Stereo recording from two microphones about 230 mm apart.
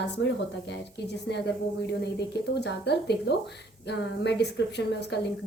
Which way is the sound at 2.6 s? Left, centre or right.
Left.